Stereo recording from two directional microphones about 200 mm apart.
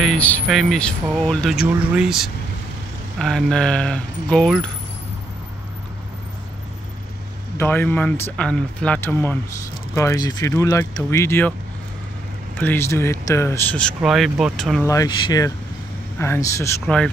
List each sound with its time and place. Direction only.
0.0 s speech: 5° left (ahead or behind)
7.5 s speech: 10° left (ahead or behind)
12.5 s speech: 10° left (ahead or behind)
14.9 s speech: 20° left (ahead or behind); by 17.1 s 5° left (ahead or behind)